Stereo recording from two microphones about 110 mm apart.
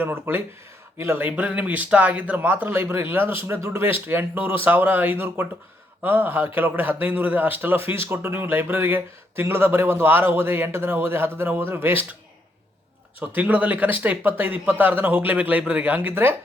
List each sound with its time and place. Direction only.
0.0 s speech: 20° right (ahead or behind)
13.1 s speech: 15° right (ahead or behind)